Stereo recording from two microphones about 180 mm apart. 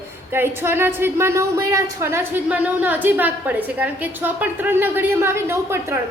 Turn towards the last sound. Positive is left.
turn(degrees=-15)  # may be behind; listen again after turning